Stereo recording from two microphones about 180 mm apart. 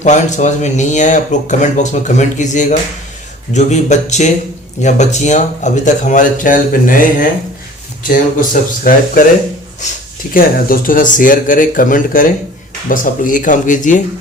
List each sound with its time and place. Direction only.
0.0 s speech: 40° left (ahead or behind)
10.3 s speech: 50° left (ahead or behind)